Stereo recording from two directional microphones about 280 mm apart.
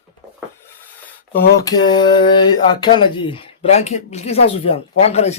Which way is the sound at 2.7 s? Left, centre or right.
Centre.